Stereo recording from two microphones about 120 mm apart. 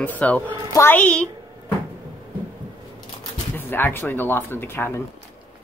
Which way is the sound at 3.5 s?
15° left (ahead or behind).